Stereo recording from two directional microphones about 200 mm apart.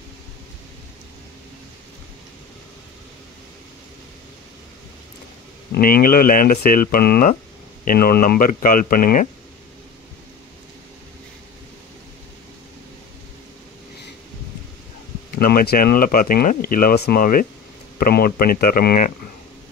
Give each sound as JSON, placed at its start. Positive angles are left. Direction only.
{"t": 5.7, "sound": "speech", "side_deg": 50}
{"t": 15.3, "sound": "speech", "side_deg": 50}